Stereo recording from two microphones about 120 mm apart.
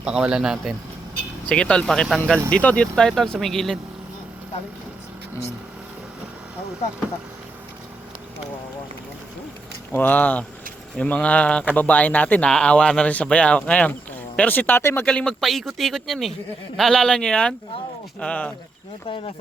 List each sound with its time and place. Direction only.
0.0 s speech: 5° right (ahead or behind)
1.5 s speech: 10° left (ahead or behind)
9.9 s speech: 15° left (ahead or behind)
15.0 s speech: 5° left (ahead or behind)
19.0 s speech: 50° left (ahead or behind)